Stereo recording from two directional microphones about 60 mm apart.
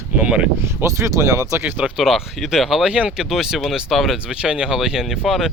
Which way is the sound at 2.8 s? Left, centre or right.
Centre.